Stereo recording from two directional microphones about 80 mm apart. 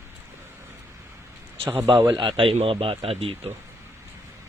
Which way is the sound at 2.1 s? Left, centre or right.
Right.